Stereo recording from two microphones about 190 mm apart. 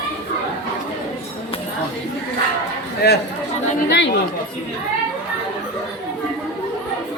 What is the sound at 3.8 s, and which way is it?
Speech, 70° left (ahead or behind).